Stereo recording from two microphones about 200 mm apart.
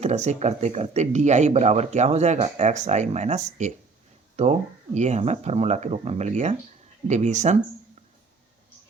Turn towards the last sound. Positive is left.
turn(degrees=-35)  # may be behind; listen again after turning